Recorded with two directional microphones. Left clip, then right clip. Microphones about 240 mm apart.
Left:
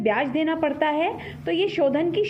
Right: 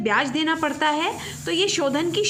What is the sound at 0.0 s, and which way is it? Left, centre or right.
A woman's voice, centre.